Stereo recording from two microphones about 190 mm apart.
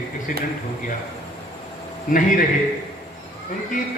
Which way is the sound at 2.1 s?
45° left (ahead or behind).